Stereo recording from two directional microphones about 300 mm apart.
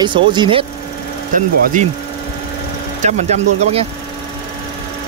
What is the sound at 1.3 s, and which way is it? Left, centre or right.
Speech, right.